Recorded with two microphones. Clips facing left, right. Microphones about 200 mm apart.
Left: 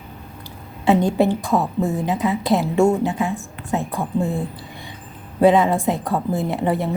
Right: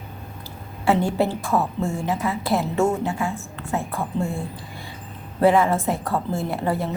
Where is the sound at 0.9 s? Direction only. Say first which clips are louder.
Left 4 dB; 20° left (ahead or behind).